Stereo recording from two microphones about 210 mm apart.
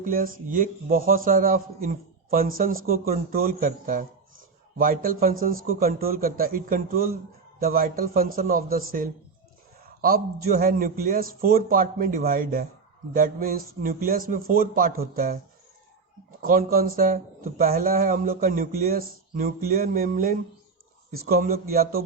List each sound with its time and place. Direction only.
0.0 s a man's voice: 40° right (ahead or behind)
16.4 s speech: 45° right (ahead or behind)